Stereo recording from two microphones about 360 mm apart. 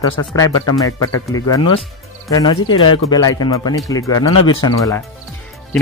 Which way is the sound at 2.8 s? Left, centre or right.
Centre.